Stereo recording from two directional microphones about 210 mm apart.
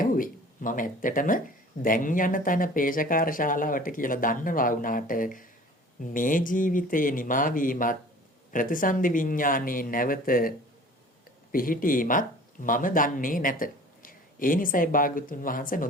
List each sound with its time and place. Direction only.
0.0 s speech: 40° left (ahead or behind)
11.5 s speech: 40° left (ahead or behind)